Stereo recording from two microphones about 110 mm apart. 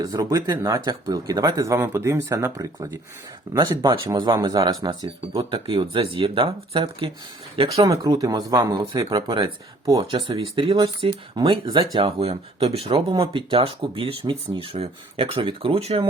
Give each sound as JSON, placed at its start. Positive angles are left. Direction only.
{"t": 0.0, "sound": "speech", "side_deg": -35}
{"t": 5.4, "sound": "speech", "side_deg": -50}
{"t": 7.8, "sound": "speech", "side_deg": -35}
{"t": 9.0, "sound": "speech", "side_deg": -45}
{"t": 10.0, "sound": "speech", "side_deg": -50}
{"t": 11.9, "sound": "speech", "side_deg": -65}